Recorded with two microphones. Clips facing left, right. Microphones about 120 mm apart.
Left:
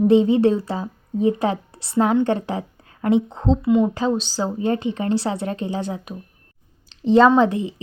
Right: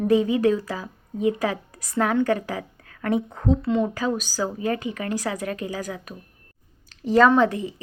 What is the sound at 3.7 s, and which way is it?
Speech, 10° left (ahead or behind).